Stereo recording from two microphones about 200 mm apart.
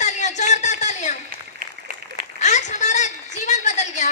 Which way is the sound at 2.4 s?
35° left (ahead or behind).